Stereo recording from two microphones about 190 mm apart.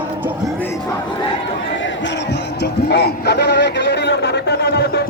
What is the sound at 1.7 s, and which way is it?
Music, 70° left (ahead or behind).